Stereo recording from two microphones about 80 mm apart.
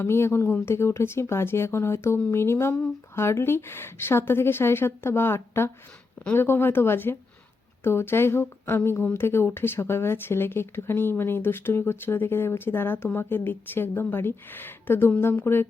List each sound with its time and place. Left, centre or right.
0.0 s a woman's voice: left